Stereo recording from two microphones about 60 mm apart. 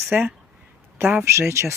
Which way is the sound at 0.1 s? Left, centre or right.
Right.